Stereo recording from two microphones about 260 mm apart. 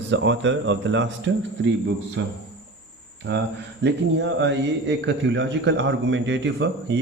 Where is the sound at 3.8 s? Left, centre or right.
Right.